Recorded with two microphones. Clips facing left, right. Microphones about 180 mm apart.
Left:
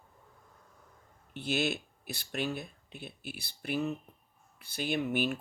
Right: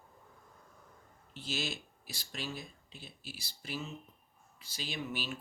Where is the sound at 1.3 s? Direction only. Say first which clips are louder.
Left 8 dB; 60° left (ahead or behind).